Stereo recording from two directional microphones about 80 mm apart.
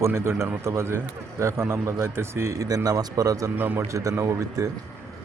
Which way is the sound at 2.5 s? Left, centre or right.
Right.